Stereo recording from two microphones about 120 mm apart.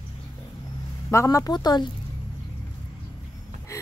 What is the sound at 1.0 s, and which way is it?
Speech, 25° left (ahead or behind).